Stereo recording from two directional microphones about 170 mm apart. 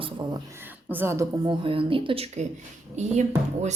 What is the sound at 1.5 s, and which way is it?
Speech, 30° right (ahead or behind).